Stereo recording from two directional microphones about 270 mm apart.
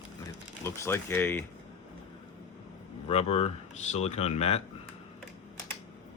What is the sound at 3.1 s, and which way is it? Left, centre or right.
Speech, left.